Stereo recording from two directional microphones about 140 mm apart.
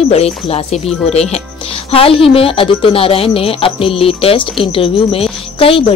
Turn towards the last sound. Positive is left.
turn(degrees=40)  # may be behind; listen again after turning